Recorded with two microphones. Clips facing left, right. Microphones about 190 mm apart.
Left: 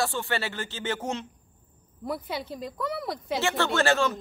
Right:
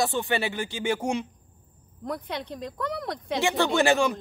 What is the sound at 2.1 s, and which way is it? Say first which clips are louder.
Speech: even; 5° left (ahead or behind).